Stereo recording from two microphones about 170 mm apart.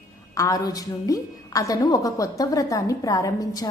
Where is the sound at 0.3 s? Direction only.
20° left (ahead or behind).